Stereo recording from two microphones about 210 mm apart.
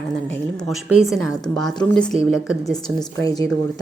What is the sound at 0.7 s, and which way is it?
A woman's voice, 5° right (ahead or behind).